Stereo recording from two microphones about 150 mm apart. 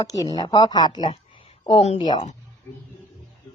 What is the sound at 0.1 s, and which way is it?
Speech, 25° left (ahead or behind).